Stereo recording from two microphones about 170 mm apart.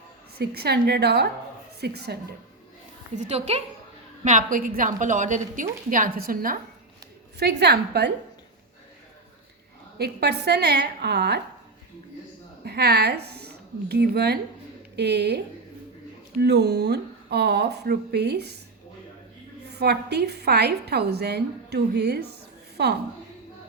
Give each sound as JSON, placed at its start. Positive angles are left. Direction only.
{"t": 0.3, "sound": "a woman's voice", "side_deg": -70}
{"t": 3.2, "sound": "a woman's voice", "side_deg": -40}
{"t": 7.3, "sound": "a woman's voice", "side_deg": -70}
{"t": 10.0, "sound": "a woman's voice", "side_deg": -75}
{"t": 12.6, "sound": "a woman's voice", "side_deg": -70}
{"t": 16.4, "sound": "a woman's voice", "side_deg": -80}
{"t": 19.7, "sound": "a woman's voice", "side_deg": -75}